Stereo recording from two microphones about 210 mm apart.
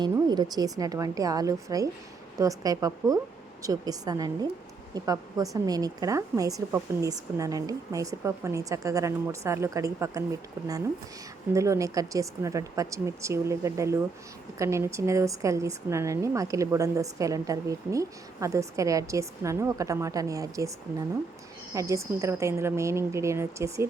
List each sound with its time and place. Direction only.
0.0 s a woman's voice: 20° right (ahead or behind)
11.5 s a woman's voice: 15° right (ahead or behind)
21.7 s a woman's voice: 15° right (ahead or behind)